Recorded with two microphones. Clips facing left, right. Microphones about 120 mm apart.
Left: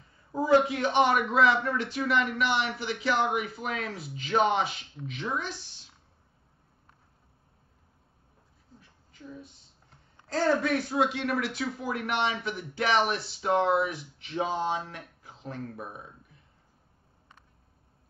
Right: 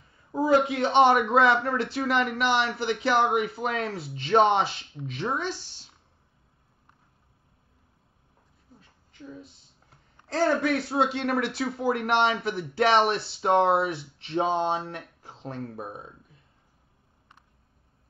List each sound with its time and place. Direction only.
0.3 s a sound: 20° right (ahead or behind)
0.7 s speech: 30° right (ahead or behind)
10.5 s speech: 30° right (ahead or behind)